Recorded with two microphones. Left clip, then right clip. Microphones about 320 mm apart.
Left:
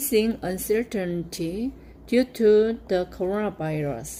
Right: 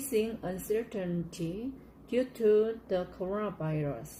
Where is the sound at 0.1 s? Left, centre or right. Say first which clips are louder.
Left 8 dB; left.